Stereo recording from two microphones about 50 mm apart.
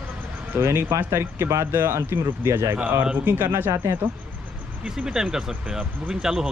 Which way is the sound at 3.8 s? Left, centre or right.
Right.